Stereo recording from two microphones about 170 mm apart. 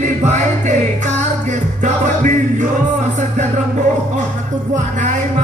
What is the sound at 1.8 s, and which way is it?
Music, 45° right (ahead or behind).